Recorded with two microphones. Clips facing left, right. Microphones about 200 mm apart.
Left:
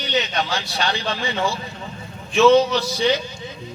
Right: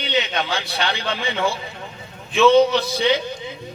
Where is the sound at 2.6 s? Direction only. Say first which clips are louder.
Right 3 dB; 55° right (ahead or behind).